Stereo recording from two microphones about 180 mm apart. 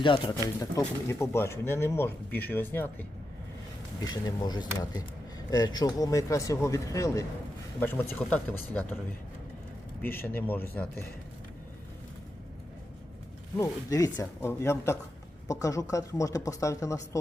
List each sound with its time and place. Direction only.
0.8 s speech: 15° left (ahead or behind)
4.0 s speech: 20° left (ahead or behind)
10.0 s speech: 10° left (ahead or behind)
13.6 s speech: 20° left (ahead or behind)